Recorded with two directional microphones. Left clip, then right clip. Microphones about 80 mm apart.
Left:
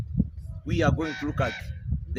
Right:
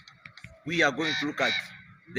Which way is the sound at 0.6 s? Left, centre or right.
Centre.